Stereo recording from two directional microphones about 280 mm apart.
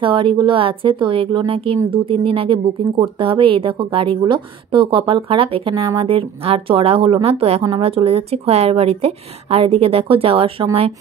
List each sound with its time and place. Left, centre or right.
0.0 s a woman's voice: centre